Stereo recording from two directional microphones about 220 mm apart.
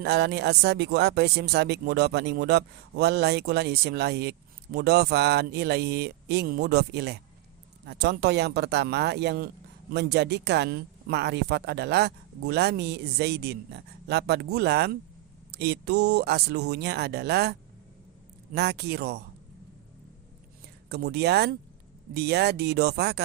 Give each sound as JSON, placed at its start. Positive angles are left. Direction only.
{"t": 0.0, "sound": "speech", "side_deg": -50}
{"t": 20.9, "sound": "speech", "side_deg": -45}